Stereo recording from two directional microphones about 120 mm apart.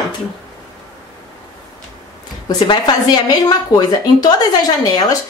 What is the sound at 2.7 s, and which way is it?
A woman's voice, 35° left (ahead or behind).